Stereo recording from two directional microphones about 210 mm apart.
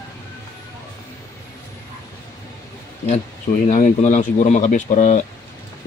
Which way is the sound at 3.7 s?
35° left (ahead or behind).